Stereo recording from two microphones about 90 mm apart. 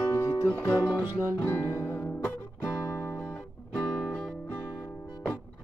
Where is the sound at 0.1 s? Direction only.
30° left (ahead or behind).